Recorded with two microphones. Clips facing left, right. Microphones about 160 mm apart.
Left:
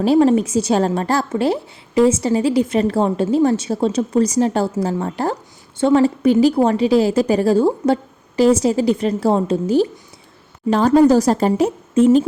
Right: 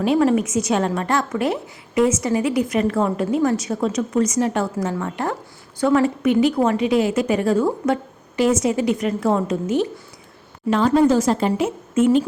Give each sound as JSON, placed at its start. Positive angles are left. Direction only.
{"t": 0.0, "sound": "a woman's voice", "side_deg": 35}